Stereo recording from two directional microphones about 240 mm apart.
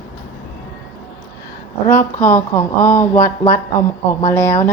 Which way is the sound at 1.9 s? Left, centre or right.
Centre.